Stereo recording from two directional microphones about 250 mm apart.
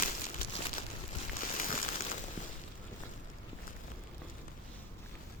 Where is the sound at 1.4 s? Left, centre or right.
Left.